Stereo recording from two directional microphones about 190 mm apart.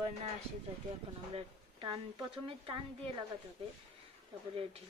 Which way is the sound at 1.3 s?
25° right (ahead or behind).